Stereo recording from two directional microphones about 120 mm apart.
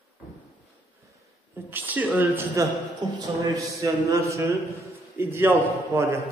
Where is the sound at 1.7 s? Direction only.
15° right (ahead or behind).